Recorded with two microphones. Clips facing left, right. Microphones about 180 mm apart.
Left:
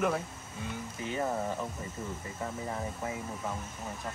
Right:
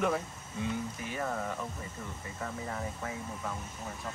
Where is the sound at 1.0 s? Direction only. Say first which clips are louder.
Left 3 dB; 25° left (ahead or behind).